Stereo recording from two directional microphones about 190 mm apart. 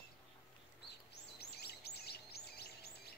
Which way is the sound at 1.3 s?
55° left (ahead or behind).